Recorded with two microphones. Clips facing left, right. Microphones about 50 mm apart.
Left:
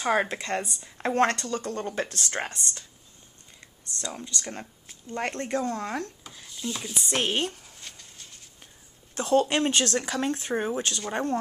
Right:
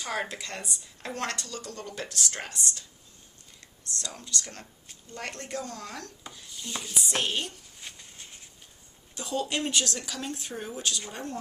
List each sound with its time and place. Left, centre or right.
0.0 s speech: left
4.0 s speech: left
5.1 s speech: left
6.2 s speech: centre
7.2 s speech: left
7.8 s a sound: centre
9.1 s speech: left